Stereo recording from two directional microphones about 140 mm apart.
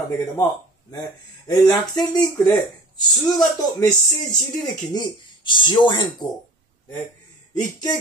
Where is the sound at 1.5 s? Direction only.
30° left (ahead or behind).